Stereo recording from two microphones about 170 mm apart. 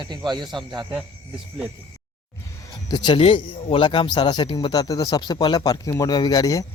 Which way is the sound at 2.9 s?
25° left (ahead or behind).